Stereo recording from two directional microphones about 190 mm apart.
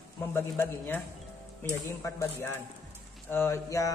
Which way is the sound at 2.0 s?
10° left (ahead or behind).